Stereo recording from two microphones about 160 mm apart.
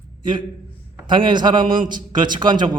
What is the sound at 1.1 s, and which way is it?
Speech, 30° right (ahead or behind).